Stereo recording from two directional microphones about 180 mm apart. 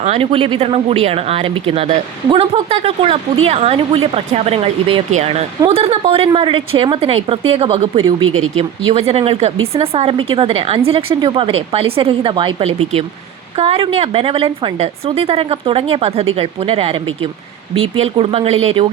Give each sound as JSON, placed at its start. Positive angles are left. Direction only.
{"t": 0.0, "sound": "a woman's voice", "side_deg": -35}
{"t": 18.0, "sound": "a woman's voice", "side_deg": -30}